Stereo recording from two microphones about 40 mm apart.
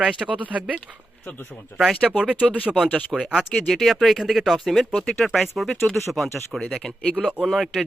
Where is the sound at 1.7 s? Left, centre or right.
Left.